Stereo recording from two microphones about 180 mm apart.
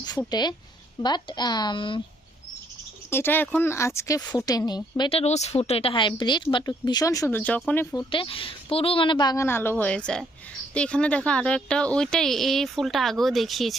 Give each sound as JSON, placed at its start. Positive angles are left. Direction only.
{"t": 0.0, "sound": "a woman's voice", "side_deg": 20}
{"t": 3.1, "sound": "speech", "side_deg": 10}
{"t": 7.9, "sound": "speech", "side_deg": 30}